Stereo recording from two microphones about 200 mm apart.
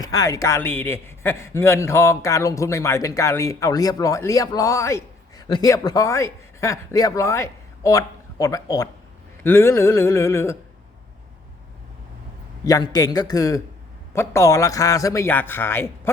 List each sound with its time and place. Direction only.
0.0 s a man's voice: 15° left (ahead or behind)
12.6 s a man's voice: 20° left (ahead or behind)